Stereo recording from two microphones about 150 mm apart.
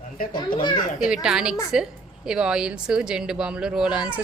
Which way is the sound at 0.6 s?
30° left (ahead or behind).